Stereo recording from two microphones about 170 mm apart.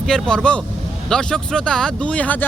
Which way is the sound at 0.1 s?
5° left (ahead or behind).